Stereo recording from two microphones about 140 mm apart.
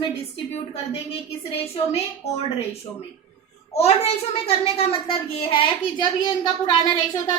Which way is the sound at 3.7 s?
45° left (ahead or behind).